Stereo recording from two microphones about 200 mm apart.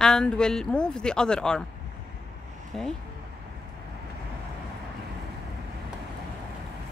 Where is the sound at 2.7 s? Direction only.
Centre (ahead or behind).